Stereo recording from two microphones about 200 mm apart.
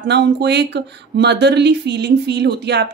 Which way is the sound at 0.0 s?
60° right (ahead or behind).